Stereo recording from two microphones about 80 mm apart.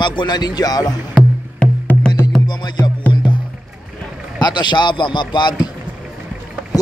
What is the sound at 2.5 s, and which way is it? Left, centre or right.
Music, left.